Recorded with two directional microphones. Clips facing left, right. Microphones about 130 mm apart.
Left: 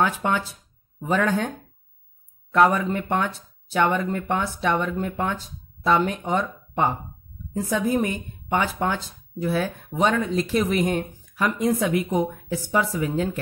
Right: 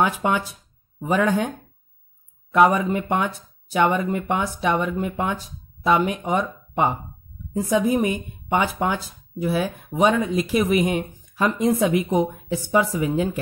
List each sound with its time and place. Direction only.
0.0 s speech: 15° right (ahead or behind)
2.5 s speech: 15° right (ahead or behind)
11.3 s speech: 25° right (ahead or behind)